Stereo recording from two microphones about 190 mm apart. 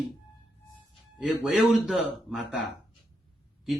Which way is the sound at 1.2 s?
Centre (ahead or behind).